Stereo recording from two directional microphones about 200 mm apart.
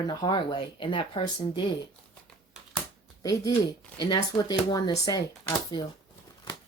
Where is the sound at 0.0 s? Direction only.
20° left (ahead or behind).